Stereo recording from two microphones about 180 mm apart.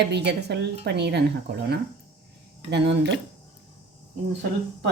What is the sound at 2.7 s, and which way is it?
Speech, 75° right (ahead or behind).